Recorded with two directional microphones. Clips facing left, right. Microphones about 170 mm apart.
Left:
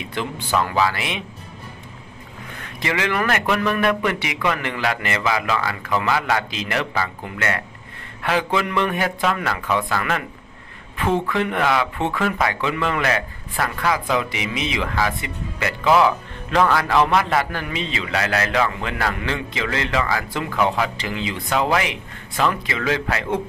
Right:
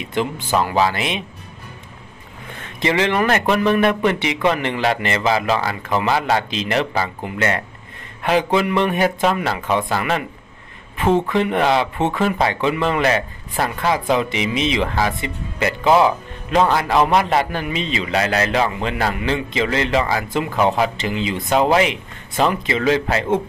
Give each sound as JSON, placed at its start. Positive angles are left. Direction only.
{"t": 0.2, "sound": "a man's voice", "side_deg": -20}
{"t": 2.8, "sound": "a man's voice", "side_deg": -25}